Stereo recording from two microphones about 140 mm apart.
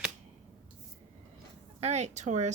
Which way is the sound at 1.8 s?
55° right (ahead or behind).